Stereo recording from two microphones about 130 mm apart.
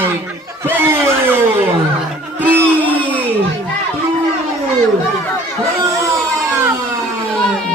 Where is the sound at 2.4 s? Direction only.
15° right (ahead or behind).